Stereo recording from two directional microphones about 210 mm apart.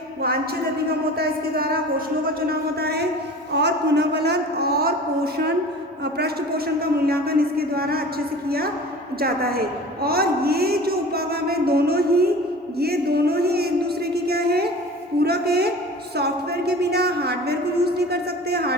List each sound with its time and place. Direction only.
1.2 s speech: 45° right (ahead or behind)
6.7 s a woman's voice: 45° right (ahead or behind)
12.8 s a sound: 50° right (ahead or behind)
16.1 s a woman's voice: 50° right (ahead or behind)